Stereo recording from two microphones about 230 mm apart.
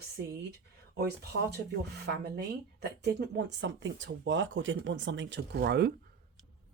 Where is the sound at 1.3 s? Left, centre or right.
Right.